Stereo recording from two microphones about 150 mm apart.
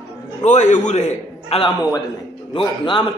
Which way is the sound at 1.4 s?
40° left (ahead or behind).